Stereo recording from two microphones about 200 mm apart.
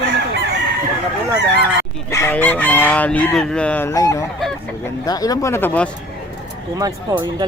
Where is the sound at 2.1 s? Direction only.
10° left (ahead or behind).